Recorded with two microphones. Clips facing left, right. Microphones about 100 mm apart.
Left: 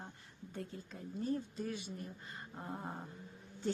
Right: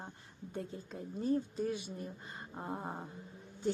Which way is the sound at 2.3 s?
20° right (ahead or behind).